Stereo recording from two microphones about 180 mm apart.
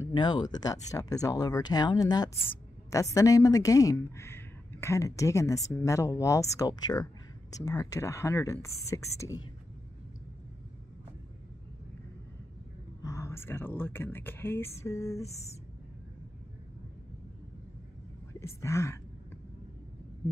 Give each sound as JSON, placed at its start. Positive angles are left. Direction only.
{"t": 0.1, "sound": "a woman's voice", "side_deg": 25}
{"t": 13.0, "sound": "speech", "side_deg": 15}
{"t": 18.4, "sound": "speech", "side_deg": 15}